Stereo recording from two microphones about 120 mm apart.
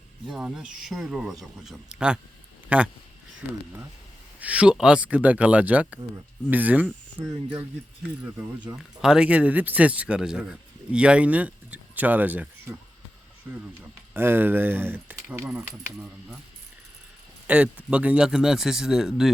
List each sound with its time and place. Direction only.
0.3 s speech: 5° right (ahead or behind)
4.4 s speech: 10° right (ahead or behind)
9.0 s speech: 5° right (ahead or behind)
14.1 s speech: 15° right (ahead or behind)
17.4 s speech: 10° right (ahead or behind)